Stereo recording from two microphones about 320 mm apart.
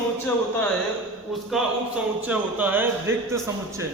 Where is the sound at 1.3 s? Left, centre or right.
Centre.